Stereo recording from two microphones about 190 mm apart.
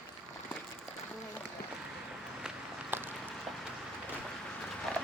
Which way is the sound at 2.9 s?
10° right (ahead or behind).